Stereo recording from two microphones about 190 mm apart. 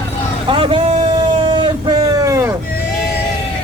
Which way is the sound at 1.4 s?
25° right (ahead or behind).